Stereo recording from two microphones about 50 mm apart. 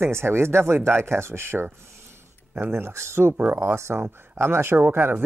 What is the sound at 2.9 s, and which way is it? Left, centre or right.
Speech, right.